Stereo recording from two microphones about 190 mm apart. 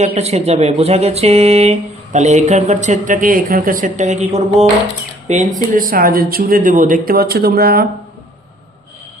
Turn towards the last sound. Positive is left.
turn(degrees=-55)  # may be behind; listen again after turning